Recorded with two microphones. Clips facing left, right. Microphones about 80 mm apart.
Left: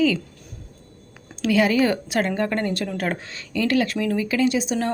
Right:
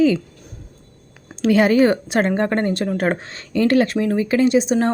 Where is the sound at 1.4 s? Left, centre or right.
Right.